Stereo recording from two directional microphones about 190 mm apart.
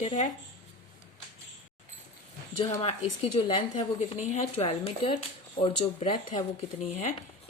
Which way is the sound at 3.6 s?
30° left (ahead or behind).